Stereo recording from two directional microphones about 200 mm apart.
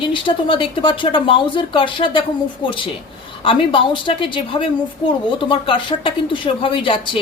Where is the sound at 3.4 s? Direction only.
25° left (ahead or behind).